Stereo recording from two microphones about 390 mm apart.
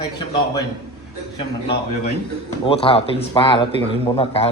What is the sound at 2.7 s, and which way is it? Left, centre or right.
A man's voice, centre.